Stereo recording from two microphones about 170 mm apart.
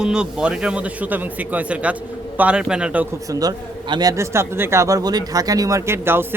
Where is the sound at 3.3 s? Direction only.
20° right (ahead or behind).